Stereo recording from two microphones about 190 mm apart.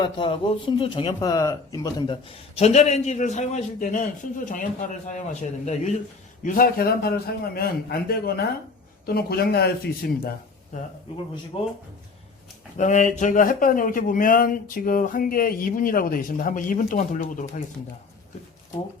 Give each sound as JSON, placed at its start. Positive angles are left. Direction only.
{"t": 0.0, "sound": "a man's voice", "side_deg": 25}
{"t": 11.5, "sound": "speech", "side_deg": 30}
{"t": 12.7, "sound": "a man's voice", "side_deg": 40}